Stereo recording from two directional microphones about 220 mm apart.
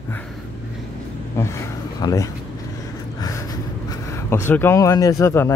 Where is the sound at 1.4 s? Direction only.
10° left (ahead or behind).